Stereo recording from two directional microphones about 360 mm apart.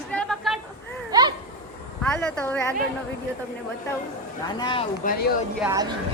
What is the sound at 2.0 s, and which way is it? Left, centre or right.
Speech, centre.